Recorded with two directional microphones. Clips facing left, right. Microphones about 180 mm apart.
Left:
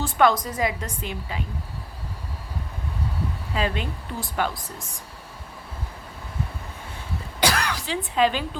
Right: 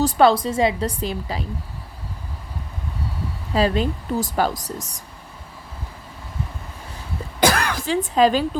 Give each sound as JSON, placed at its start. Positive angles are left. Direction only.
{"t": 0.0, "sound": "speech", "side_deg": -35}
{"t": 3.5, "sound": "speech", "side_deg": -35}
{"t": 7.3, "sound": "cough", "side_deg": -50}